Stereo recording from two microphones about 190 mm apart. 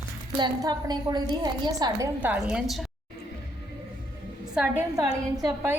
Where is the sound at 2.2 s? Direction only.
5° right (ahead or behind).